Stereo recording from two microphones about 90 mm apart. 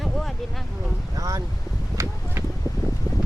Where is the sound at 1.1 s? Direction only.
40° right (ahead or behind).